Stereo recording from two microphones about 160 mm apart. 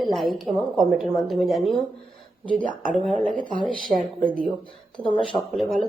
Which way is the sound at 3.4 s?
55° right (ahead or behind).